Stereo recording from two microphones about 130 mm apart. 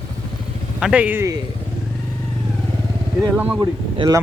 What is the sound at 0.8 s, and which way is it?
Speech, 10° right (ahead or behind).